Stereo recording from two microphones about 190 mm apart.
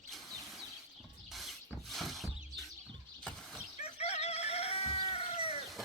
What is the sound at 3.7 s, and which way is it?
Chicken, 35° left (ahead or behind).